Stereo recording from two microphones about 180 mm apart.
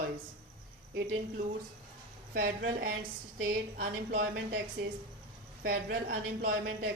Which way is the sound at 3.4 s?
55° right (ahead or behind).